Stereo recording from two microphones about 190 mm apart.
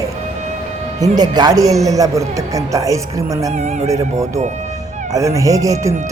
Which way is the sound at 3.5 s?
35° right (ahead or behind).